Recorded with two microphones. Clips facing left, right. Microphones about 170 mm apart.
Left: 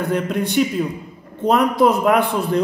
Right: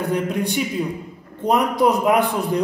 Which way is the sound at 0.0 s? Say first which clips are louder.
Left 1 dB; 15° right (ahead or behind).